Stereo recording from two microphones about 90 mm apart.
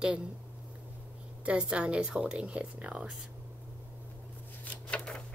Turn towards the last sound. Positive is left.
turn(degrees=15)  # may be behind; listen again after turning